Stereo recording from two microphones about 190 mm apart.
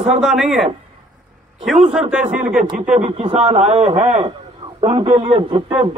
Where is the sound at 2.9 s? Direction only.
30° right (ahead or behind).